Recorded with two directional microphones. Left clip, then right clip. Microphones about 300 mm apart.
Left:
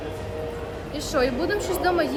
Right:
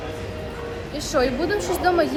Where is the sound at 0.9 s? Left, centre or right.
Centre.